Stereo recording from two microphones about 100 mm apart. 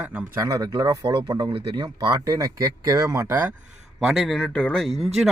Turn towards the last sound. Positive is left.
turn(degrees=-5)  # may be behind; listen again after turning